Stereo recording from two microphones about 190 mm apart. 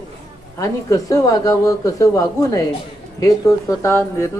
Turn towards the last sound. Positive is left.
turn(degrees=15)  # may be behind; listen again after turning